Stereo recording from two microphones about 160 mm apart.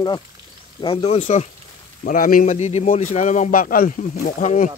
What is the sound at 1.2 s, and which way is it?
Speech, 50° left (ahead or behind).